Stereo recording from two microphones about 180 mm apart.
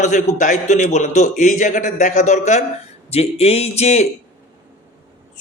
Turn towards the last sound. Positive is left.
turn(degrees=35)  # may be behind; listen again after turning